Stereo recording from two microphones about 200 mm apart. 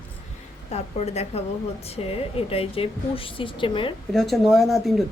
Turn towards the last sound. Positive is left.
turn(degrees=0)  # may be behind; listen again after turning